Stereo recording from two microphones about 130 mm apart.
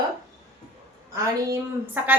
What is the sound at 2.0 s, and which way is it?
Speech, 15° right (ahead or behind).